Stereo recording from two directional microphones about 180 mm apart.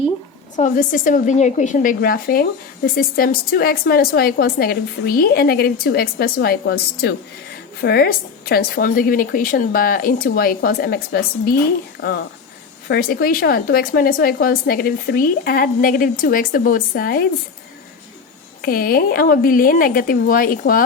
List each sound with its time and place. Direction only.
0.5 s a woman's voice: 45° left (ahead or behind)
18.6 s a woman's voice: 55° left (ahead or behind)